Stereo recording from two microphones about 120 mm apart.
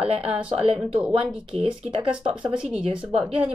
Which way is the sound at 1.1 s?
45° right (ahead or behind).